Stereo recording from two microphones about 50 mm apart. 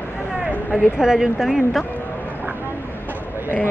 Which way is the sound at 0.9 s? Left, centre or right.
Centre.